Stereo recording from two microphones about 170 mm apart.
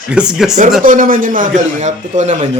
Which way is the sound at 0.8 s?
55° right (ahead or behind).